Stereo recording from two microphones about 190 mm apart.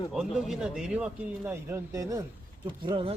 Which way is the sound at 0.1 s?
Centre (ahead or behind).